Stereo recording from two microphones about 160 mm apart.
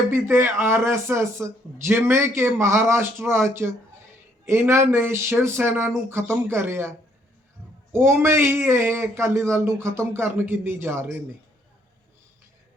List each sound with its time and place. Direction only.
0.1 s speech: 15° right (ahead or behind)
7.9 s speech: 15° right (ahead or behind)